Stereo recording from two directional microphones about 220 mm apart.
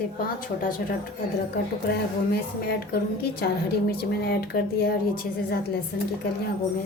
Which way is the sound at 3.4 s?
45° left (ahead or behind).